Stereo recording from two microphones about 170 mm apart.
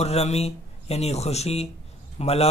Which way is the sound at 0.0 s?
40° left (ahead or behind).